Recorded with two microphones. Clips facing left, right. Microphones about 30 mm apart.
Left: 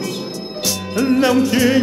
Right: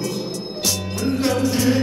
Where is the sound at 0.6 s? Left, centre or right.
Centre.